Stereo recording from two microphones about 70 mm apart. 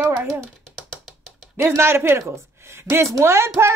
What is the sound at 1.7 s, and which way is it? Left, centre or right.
A woman's voice, right.